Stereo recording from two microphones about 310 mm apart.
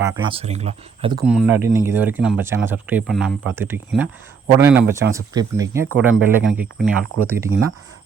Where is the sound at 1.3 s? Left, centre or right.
Centre.